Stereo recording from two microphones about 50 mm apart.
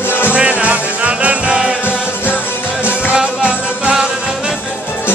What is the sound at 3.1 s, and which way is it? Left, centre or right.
Music, right.